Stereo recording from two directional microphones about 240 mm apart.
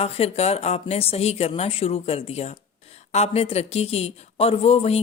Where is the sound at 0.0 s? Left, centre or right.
Left.